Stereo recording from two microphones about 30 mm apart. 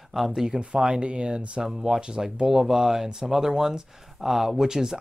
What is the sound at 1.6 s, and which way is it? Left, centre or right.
Speech, right.